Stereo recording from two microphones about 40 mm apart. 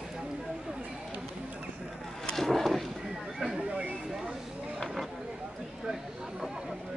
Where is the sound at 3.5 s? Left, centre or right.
Right.